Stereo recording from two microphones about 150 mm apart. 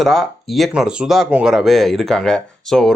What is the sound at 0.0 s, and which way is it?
Speech, centre (ahead or behind).